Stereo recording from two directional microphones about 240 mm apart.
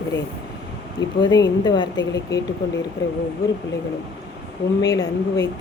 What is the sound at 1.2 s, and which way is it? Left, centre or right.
Speech, centre.